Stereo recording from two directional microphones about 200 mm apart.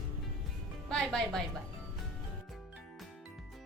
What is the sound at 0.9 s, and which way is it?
Speech, centre (ahead or behind).